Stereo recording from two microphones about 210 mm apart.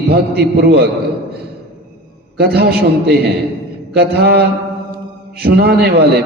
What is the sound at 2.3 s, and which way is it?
A man's voice, 50° right (ahead or behind).